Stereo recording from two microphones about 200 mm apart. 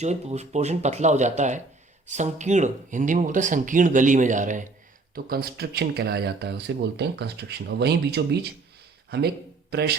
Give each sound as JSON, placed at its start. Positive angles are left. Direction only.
{"t": 0.0, "sound": "speech", "side_deg": -35}